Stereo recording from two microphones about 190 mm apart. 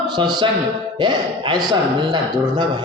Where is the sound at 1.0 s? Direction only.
25° right (ahead or behind).